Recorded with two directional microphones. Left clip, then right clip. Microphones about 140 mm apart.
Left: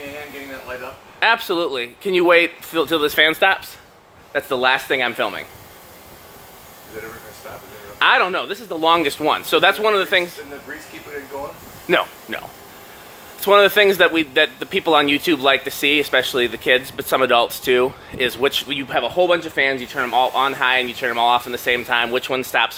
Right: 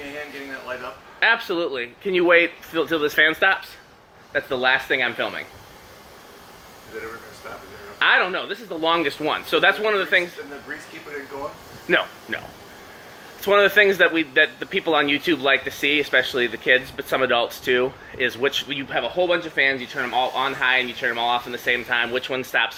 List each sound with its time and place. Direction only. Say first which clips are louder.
1.2 s speech: left 2 dB; 40° left (ahead or behind)
7.9 s speech: left 3 dB; 40° left (ahead or behind)
11.9 s speech: left 2 dB; 40° left (ahead or behind)
13.4 s speech: left 3 dB; 35° left (ahead or behind)